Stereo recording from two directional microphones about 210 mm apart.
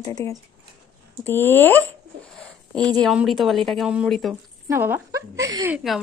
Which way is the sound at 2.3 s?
5° left (ahead or behind).